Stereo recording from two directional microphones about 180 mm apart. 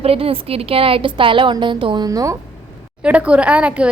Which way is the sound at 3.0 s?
5° right (ahead or behind).